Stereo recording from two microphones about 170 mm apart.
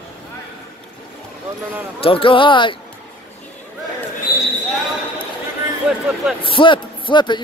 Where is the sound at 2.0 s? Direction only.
30° left (ahead or behind).